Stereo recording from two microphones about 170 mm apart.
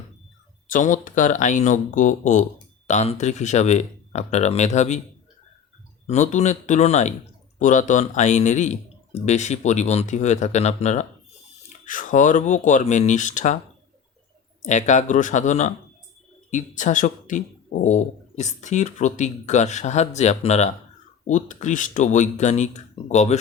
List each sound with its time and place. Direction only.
0.7 s speech: 50° left (ahead or behind)
6.1 s speech: 45° left (ahead or behind)
14.6 s speech: 45° left (ahead or behind)